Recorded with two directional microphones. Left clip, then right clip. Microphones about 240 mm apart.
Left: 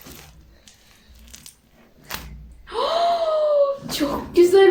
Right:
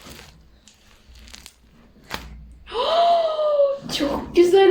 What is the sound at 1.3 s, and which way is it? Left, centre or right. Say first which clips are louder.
Coin: right 2 dB; right.